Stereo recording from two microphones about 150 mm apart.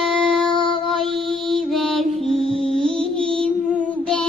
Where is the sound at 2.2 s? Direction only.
Centre (ahead or behind).